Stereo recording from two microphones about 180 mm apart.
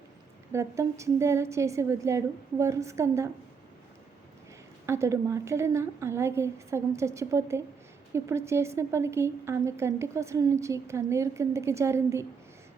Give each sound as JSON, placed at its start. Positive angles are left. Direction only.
{"t": 0.5, "sound": "a woman's voice", "side_deg": -15}
{"t": 4.9, "sound": "a woman's voice", "side_deg": -15}